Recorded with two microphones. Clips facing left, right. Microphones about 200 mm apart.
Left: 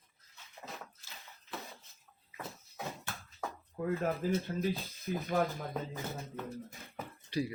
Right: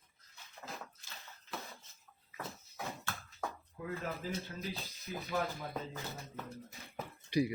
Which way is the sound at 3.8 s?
45° left (ahead or behind).